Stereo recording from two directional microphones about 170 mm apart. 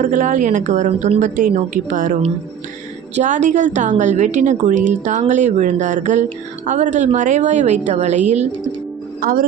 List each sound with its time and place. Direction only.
0.0 s a woman's voice: 50° right (ahead or behind)
1.2 s a woman's voice: 50° right (ahead or behind)
3.2 s a woman's voice: 45° right (ahead or behind)
9.2 s speech: 60° right (ahead or behind)